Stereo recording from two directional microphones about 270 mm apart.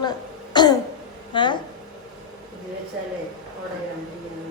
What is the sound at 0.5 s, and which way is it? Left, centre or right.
Throat clearing, centre.